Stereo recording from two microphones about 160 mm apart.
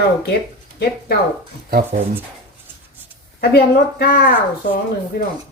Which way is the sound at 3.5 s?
75° left (ahead or behind).